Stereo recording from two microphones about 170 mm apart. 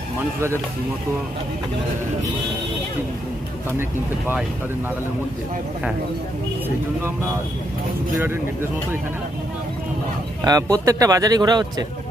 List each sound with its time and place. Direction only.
10.4 s speech: 20° right (ahead or behind)